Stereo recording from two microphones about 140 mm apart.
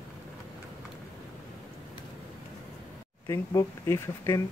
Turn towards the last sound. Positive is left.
turn(degrees=20)  # may be behind; listen again after turning